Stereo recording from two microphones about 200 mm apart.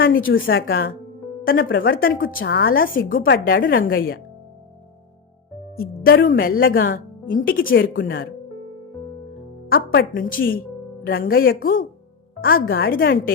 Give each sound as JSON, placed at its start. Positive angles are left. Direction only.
{"t": 0.0, "sound": "a woman's voice", "side_deg": 45}
{"t": 5.7, "sound": "a woman's voice", "side_deg": 50}
{"t": 9.6, "sound": "a woman's voice", "side_deg": 50}